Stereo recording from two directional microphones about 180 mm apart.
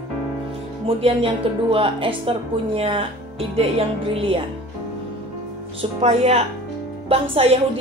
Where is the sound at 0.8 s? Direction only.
30° right (ahead or behind).